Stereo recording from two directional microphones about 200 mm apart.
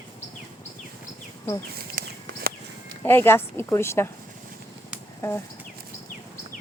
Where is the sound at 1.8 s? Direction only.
50° right (ahead or behind).